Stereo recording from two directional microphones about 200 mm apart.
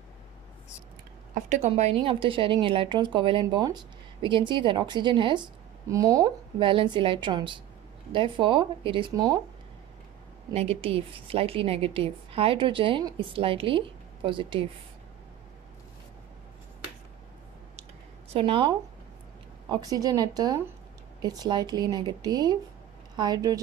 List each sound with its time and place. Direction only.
1.3 s a woman's voice: 35° right (ahead or behind); by 9.4 s 20° right (ahead or behind)
10.5 s a woman's voice: 30° right (ahead or behind)
18.3 s a woman's voice: 25° right (ahead or behind)